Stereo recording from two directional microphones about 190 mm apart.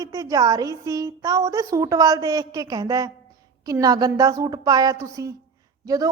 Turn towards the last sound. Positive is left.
turn(degrees=-15)  # may be behind; listen again after turning